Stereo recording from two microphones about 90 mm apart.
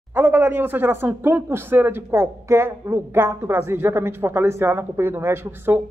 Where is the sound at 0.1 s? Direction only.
25° right (ahead or behind).